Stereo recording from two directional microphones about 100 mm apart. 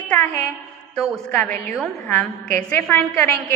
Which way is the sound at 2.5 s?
20° left (ahead or behind).